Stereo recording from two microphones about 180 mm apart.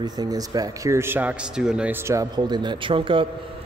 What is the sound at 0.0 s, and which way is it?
Speech, 20° right (ahead or behind).